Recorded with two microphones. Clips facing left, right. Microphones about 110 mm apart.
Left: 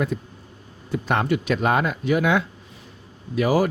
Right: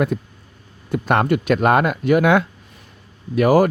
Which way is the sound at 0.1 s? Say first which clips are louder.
Right 4 dB; 55° right (ahead or behind).